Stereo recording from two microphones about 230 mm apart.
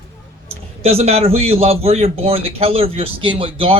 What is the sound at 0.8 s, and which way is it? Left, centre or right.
A man's voice, right.